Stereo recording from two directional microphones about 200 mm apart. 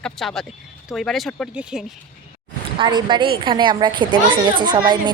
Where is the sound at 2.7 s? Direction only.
25° right (ahead or behind).